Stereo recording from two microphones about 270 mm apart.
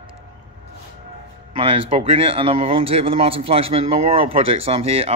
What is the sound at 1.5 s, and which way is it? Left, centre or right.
A man's voice, centre.